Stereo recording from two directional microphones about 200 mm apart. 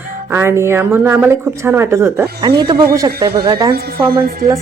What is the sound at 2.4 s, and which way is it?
Speech, 20° right (ahead or behind).